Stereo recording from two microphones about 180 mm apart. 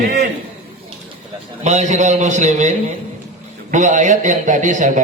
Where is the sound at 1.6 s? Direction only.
40° right (ahead or behind).